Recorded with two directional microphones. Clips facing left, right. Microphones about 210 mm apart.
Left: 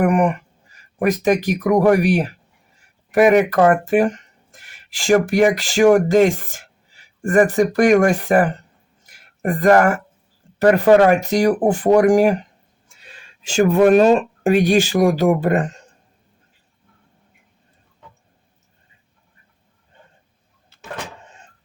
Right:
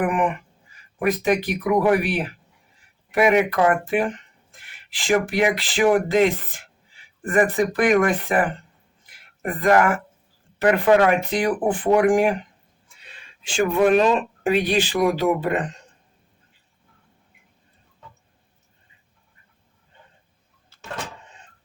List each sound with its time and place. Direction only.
0.0 s speech: 40° left (ahead or behind)
9.0 s a sound: 45° left (ahead or behind)
10.6 s speech: 40° left (ahead or behind)